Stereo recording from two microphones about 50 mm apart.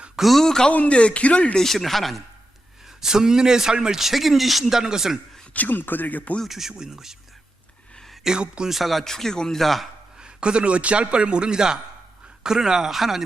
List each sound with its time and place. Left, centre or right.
0.2 s speech: centre
0.7 s speech: left
1.5 s a man's voice: centre
3.0 s a man's voice: centre
5.5 s speech: left
6.4 s a man's voice: centre
7.9 s a sound: centre
8.2 s a man's voice: centre
8.7 s a man's voice: centre
10.2 s a man's voice: centre